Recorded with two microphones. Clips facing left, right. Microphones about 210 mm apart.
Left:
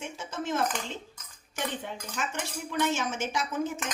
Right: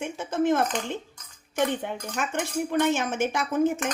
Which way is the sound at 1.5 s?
55° right (ahead or behind).